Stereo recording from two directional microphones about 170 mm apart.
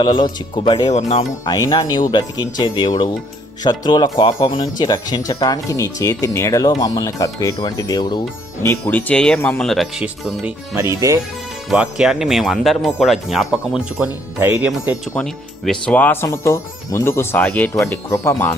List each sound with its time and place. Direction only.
0.0 s speech: 30° left (ahead or behind)
0.9 s speech: 40° left (ahead or behind)
1.5 s speech: 20° left (ahead or behind)
8.7 s speech: 10° left (ahead or behind); by 11.2 s 15° right (ahead or behind)
11.7 s speech: 5° right (ahead or behind)
15.1 s speech: 5° left (ahead or behind)